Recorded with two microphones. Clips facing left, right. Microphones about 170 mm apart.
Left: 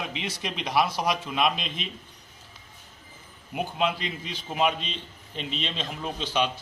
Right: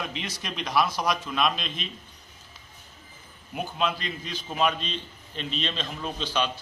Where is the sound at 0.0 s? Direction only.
15° left (ahead or behind).